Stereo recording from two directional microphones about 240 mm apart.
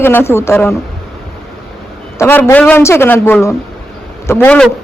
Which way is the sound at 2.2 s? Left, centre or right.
Centre.